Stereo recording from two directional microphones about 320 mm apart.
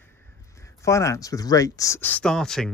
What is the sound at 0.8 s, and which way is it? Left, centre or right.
Speech, centre.